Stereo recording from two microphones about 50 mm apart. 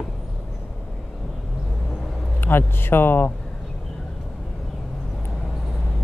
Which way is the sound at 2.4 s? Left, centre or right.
Left.